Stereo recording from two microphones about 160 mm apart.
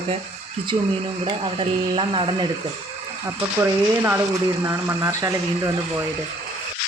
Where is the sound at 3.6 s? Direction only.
15° right (ahead or behind).